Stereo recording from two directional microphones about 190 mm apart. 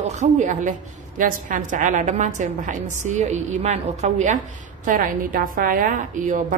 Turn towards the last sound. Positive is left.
turn(degrees=-45)  # may be behind; listen again after turning